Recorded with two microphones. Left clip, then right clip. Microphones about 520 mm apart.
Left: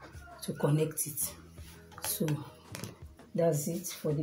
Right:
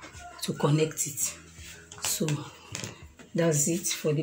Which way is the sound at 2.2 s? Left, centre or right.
Left.